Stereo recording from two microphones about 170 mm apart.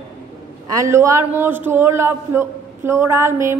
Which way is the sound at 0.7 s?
20° right (ahead or behind).